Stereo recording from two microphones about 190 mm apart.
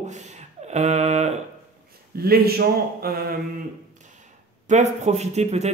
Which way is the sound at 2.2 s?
55° right (ahead or behind).